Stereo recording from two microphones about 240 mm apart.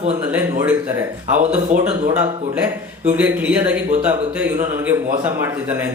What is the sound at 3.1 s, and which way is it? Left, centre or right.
Speech, centre.